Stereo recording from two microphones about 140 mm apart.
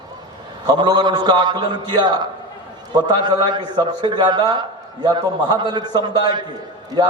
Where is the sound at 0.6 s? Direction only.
30° right (ahead or behind).